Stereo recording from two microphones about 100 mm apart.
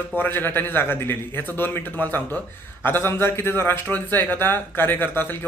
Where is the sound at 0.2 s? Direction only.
20° left (ahead or behind).